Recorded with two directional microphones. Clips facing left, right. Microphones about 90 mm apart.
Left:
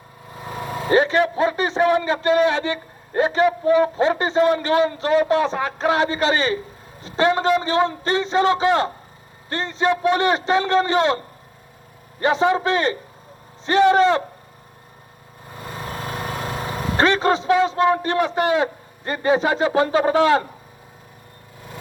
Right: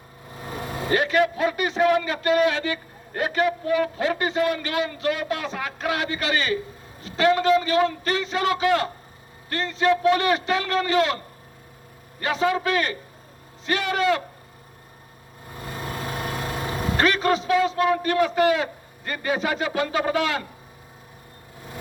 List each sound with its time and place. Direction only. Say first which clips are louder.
0.9 s a man's voice: left 4 dB; 25° left (ahead or behind)
12.2 s a man's voice: left 5 dB; 25° left (ahead or behind)
16.6 s a man's voice: left 3 dB; 25° left (ahead or behind)